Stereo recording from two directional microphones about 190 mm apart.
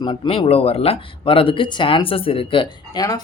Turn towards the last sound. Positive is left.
turn(degrees=20)  # may be behind; listen again after turning